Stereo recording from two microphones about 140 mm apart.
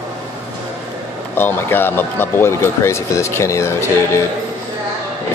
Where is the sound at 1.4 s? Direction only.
15° left (ahead or behind).